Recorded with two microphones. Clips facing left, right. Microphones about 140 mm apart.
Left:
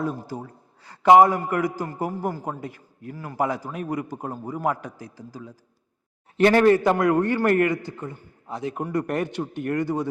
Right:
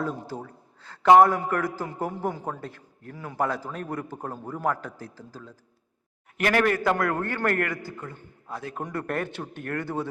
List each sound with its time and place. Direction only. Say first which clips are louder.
0.0 s a man's voice: left 2 dB; 10° left (ahead or behind)
6.3 s a man's voice: left 7 dB; 30° left (ahead or behind)